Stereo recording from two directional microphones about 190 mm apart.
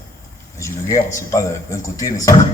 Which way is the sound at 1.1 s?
15° left (ahead or behind).